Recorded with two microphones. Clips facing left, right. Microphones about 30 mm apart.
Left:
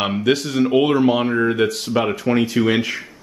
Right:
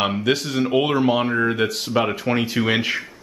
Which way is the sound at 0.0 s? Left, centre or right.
Centre.